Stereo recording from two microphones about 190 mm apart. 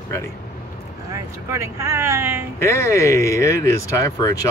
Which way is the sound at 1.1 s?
15° right (ahead or behind).